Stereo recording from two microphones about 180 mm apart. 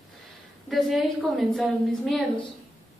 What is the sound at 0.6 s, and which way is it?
A woman's voice, centre (ahead or behind).